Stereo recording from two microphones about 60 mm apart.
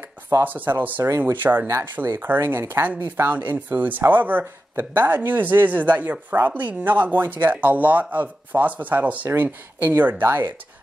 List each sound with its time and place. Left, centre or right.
0.4 s speech: right
1.0 s speech: right
1.3 s speech: right
2.4 s speech: right